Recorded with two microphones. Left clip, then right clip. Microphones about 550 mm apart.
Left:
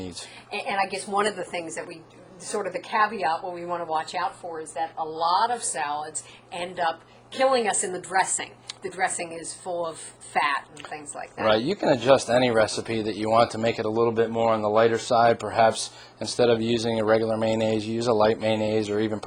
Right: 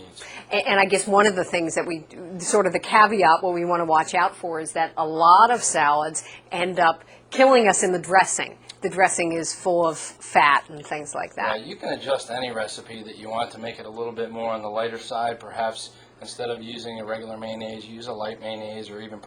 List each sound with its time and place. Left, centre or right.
0.5 s a woman's voice: right
11.5 s speech: left